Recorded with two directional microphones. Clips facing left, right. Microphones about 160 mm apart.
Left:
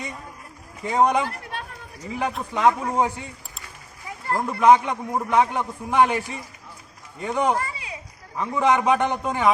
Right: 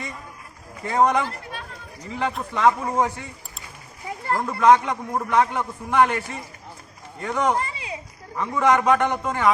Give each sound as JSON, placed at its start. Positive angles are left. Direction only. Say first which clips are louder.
{"t": 0.9, "sound": "a man's voice", "louder": "even", "side_deg": 15}
{"t": 4.4, "sound": "a man's voice", "louder": "even", "side_deg": 10}
{"t": 7.5, "sound": "a sound", "louder": "right 1 dB", "side_deg": -25}
{"t": 8.4, "sound": "a man's voice", "louder": "right 1 dB", "side_deg": 15}